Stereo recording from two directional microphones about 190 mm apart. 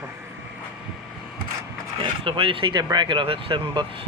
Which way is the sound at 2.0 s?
25° right (ahead or behind).